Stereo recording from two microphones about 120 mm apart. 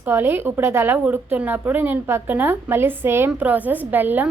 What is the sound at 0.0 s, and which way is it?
A woman's voice, 15° right (ahead or behind).